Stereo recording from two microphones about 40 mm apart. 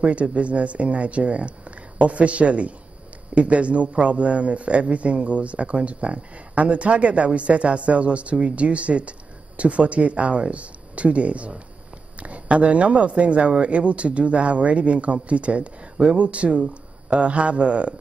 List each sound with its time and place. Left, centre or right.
0.0 s a man's voice: right